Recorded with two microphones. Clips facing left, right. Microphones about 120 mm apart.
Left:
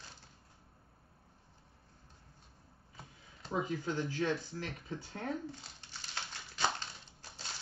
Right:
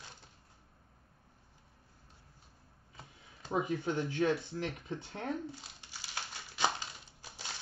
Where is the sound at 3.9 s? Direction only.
20° right (ahead or behind).